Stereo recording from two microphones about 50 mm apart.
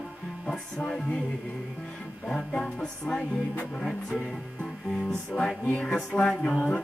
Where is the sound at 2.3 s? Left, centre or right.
Centre.